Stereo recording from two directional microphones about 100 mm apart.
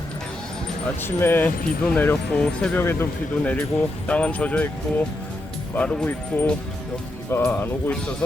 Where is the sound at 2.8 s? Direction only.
25° left (ahead or behind).